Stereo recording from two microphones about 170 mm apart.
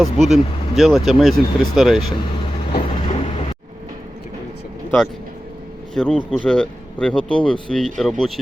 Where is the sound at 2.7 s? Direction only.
35° left (ahead or behind).